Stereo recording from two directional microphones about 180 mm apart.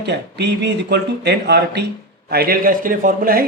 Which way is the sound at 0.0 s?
70° right (ahead or behind).